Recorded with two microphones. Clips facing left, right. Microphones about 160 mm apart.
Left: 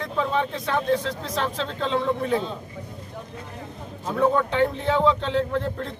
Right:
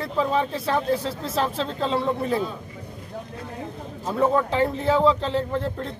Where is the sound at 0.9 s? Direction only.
5° right (ahead or behind).